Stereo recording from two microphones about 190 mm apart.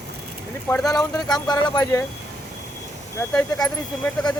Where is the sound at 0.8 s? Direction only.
20° left (ahead or behind).